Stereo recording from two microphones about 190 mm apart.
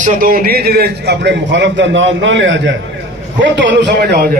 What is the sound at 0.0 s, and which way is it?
A man's voice, 50° right (ahead or behind).